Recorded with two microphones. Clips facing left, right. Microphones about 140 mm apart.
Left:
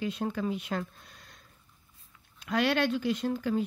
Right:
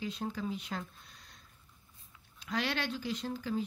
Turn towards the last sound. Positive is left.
turn(degrees=60)  # may be behind; listen again after turning